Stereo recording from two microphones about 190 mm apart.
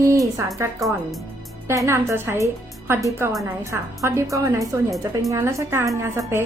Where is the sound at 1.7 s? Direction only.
15° right (ahead or behind).